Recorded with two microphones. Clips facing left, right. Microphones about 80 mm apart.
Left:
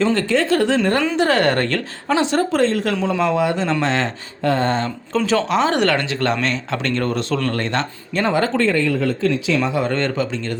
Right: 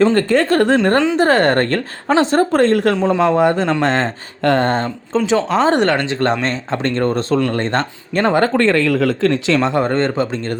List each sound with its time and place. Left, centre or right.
0.0 s speech: right
1.2 s speech: right
2.9 s speech: right
4.4 s speech: right
5.1 s speech: centre
5.5 s speech: right
7.8 s speech: right
8.6 s speech: right
9.7 s speech: right